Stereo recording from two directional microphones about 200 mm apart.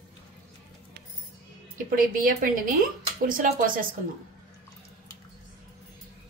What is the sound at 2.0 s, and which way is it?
A woman's voice, 45° right (ahead or behind).